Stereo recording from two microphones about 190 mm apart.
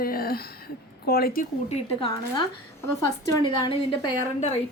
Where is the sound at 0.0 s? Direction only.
50° left (ahead or behind).